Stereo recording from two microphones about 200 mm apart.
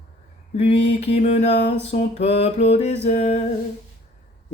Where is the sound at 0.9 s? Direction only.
30° left (ahead or behind).